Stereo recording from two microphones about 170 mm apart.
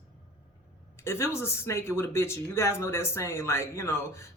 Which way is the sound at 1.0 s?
15° left (ahead or behind).